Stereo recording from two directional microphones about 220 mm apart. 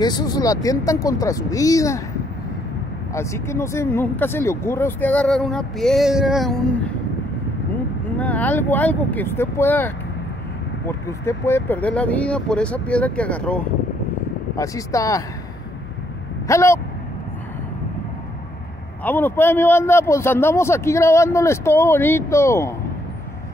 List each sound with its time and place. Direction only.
0.0 s speech: 20° left (ahead or behind)
3.2 s speech: 10° left (ahead or behind)
8.2 s speech: 5° left (ahead or behind)
16.4 s speech: 15° left (ahead or behind)
19.0 s speech: 10° left (ahead or behind)